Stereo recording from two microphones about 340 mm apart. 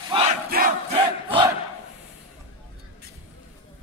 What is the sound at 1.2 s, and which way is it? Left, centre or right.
Crowd, centre.